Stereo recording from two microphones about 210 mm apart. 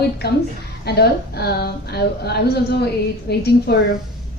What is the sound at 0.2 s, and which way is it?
A woman's voice, 50° left (ahead or behind).